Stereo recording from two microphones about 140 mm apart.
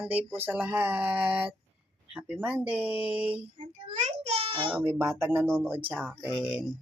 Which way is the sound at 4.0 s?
45° right (ahead or behind).